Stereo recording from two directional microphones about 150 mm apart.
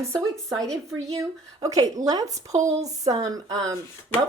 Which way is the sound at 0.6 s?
20° right (ahead or behind).